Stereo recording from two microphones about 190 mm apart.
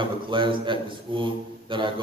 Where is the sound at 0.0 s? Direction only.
25° right (ahead or behind).